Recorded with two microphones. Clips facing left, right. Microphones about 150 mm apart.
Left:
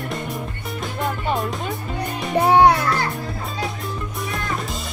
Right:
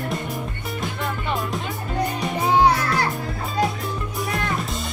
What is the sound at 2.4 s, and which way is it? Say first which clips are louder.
Music: left 4 dB; 65° left (ahead or behind).